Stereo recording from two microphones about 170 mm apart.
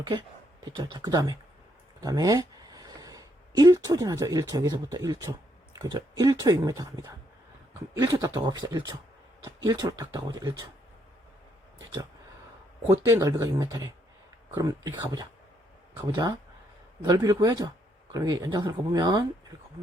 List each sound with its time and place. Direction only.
0.0 s speech: 25° right (ahead or behind)
12.9 s speech: 20° right (ahead or behind)